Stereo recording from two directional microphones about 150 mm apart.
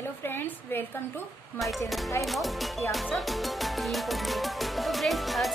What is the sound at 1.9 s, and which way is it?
Speech, centre (ahead or behind).